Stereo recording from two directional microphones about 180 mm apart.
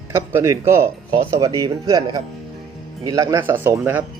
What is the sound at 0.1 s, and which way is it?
Speech, 15° right (ahead or behind).